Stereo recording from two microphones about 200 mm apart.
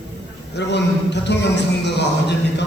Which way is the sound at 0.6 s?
60° left (ahead or behind).